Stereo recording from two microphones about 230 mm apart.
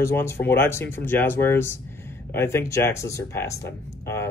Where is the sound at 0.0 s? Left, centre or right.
Centre.